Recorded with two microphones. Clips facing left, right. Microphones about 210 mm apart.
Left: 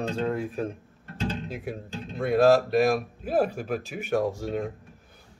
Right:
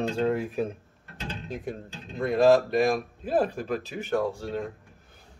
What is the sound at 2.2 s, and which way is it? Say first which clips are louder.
Speech: even; 5° left (ahead or behind).